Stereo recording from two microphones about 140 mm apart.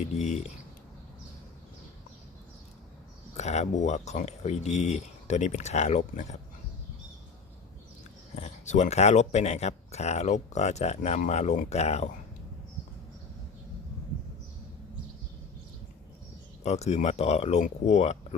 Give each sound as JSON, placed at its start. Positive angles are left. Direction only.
{"t": 0.0, "sound": "speech", "side_deg": 55}
{"t": 3.3, "sound": "speech", "side_deg": 55}
{"t": 8.4, "sound": "speech", "side_deg": 55}
{"t": 16.6, "sound": "speech", "side_deg": 50}